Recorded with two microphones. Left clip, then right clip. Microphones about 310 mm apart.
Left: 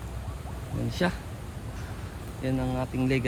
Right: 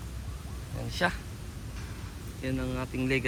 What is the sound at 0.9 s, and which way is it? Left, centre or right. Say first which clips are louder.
Speech: even; centre.